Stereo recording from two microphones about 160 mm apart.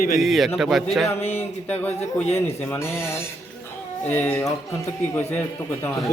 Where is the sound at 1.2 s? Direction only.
40° left (ahead or behind).